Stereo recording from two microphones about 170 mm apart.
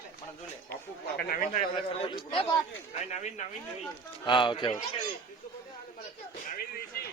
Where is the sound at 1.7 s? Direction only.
30° left (ahead or behind).